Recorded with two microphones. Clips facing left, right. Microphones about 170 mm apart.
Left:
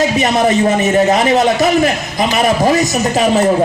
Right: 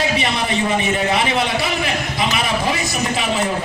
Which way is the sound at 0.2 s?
45° left (ahead or behind).